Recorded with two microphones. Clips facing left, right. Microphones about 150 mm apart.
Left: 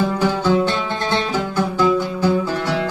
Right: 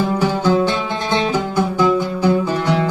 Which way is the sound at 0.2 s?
15° right (ahead or behind).